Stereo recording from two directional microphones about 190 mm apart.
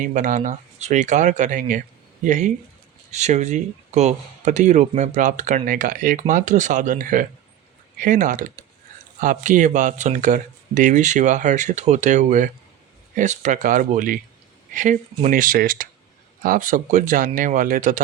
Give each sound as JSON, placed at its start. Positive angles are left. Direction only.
{"t": 0.0, "sound": "speech", "side_deg": -40}